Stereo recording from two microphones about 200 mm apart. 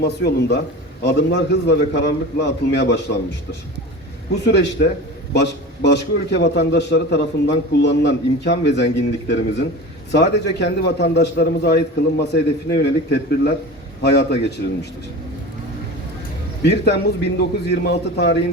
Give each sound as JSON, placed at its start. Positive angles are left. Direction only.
{"t": 0.0, "sound": "a man's voice", "side_deg": 50}
{"t": 4.4, "sound": "a man's voice", "side_deg": 60}
{"t": 16.6, "sound": "a man's voice", "side_deg": 55}